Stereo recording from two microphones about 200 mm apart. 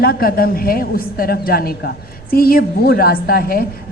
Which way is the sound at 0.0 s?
45° left (ahead or behind).